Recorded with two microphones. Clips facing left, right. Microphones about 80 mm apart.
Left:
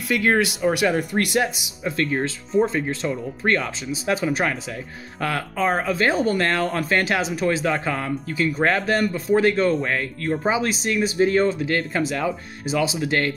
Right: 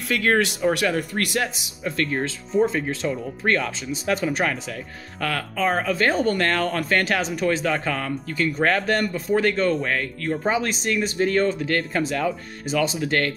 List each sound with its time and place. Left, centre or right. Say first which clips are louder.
0.1 s speech: left 1 dB; centre
0.8 s speech: left 3 dB; centre
1.9 s speech: left 1 dB; centre